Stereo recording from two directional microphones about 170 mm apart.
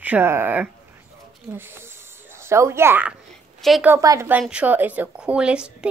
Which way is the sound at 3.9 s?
20° right (ahead or behind).